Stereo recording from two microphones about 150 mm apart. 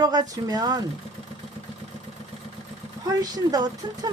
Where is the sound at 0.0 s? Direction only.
25° right (ahead or behind).